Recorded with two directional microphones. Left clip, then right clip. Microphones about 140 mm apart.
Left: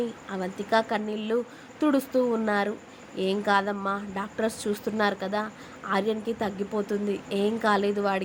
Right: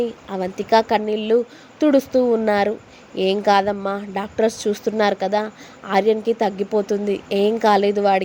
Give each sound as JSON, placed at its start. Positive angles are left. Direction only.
{"t": 0.0, "sound": "a woman's voice", "side_deg": -40}